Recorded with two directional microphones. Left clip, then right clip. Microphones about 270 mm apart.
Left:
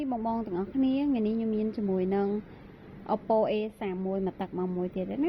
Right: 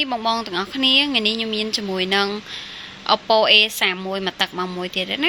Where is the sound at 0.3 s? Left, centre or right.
Centre.